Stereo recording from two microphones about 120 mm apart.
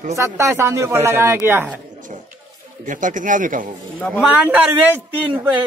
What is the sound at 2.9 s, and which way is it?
Speech, 90° right.